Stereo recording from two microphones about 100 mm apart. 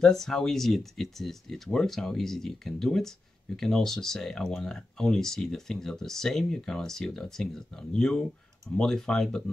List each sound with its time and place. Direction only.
0.0 s speech: 5° left (ahead or behind)